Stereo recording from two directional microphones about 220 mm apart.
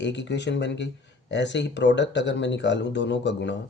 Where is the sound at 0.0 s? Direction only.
55° left (ahead or behind).